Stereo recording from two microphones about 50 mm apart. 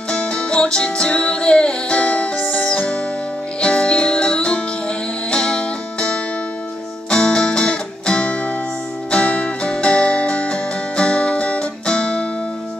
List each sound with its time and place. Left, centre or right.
0.1 s music: centre
2.7 s music: left